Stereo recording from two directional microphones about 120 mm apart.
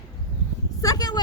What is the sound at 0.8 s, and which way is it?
Speech, 35° left (ahead or behind).